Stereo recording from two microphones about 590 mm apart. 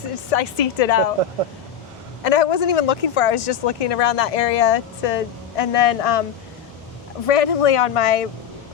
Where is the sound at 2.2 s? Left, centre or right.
Left.